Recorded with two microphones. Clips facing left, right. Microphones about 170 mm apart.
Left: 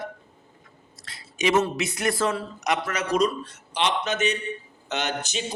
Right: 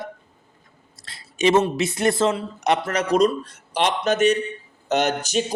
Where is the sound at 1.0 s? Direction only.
30° right (ahead or behind).